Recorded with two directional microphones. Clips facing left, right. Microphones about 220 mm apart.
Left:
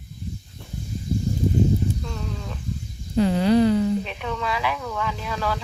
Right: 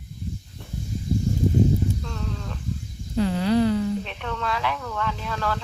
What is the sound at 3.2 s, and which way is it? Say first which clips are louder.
Speech: left 3 dB; 20° left (ahead or behind).